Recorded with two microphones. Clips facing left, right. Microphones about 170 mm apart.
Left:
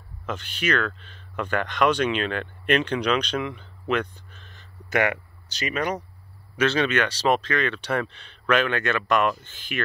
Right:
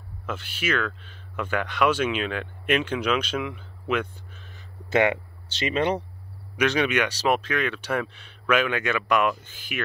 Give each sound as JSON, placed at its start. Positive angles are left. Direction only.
{"t": 0.3, "sound": "speech", "side_deg": -5}
{"t": 4.8, "sound": "speech", "side_deg": -20}
{"t": 6.5, "sound": "speech", "side_deg": -15}